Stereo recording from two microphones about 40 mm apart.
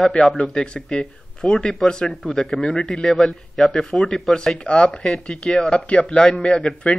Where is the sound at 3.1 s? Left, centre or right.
Centre.